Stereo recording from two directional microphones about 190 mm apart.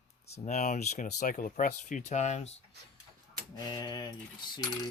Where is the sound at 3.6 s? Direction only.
20° left (ahead or behind).